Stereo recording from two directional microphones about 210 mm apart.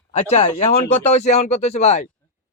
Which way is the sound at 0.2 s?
30° left (ahead or behind).